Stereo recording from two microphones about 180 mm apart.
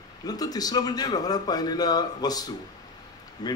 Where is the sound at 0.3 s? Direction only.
20° left (ahead or behind).